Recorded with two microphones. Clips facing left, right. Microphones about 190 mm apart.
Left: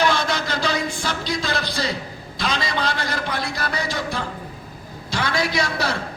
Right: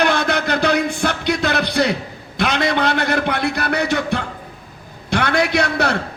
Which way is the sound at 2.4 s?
65° right (ahead or behind).